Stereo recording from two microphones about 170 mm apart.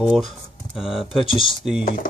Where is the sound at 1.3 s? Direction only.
30° left (ahead or behind).